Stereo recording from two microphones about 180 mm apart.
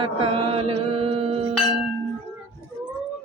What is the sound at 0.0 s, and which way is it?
Mantra, 30° right (ahead or behind).